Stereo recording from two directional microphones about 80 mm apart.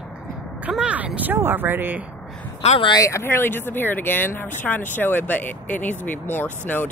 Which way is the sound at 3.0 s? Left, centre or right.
Left.